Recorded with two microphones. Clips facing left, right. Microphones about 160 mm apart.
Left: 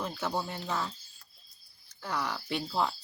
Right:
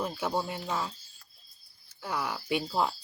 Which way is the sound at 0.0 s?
10° right (ahead or behind).